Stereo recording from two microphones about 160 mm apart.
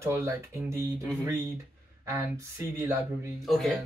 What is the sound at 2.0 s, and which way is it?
Speech, 15° right (ahead or behind).